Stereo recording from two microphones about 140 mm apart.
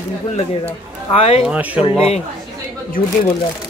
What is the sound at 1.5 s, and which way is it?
Speech, 10° right (ahead or behind).